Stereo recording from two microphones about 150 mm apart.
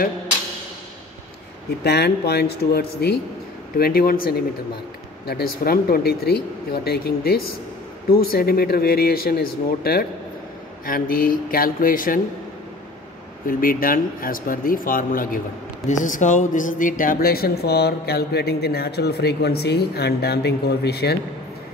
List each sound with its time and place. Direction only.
1.8 s speech: 90° left
10.9 s speech: 75° left (ahead or behind)
13.5 s speech: 70° left (ahead or behind)
15.9 s speech: 55° left (ahead or behind); by 21.2 s 90° left